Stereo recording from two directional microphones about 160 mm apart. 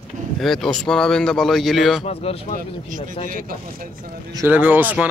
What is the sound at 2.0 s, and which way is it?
Speech, 35° left (ahead or behind).